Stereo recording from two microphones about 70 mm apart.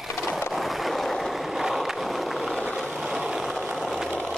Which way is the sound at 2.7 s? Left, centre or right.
Centre.